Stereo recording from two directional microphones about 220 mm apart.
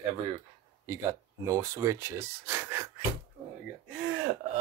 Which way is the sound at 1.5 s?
15° right (ahead or behind).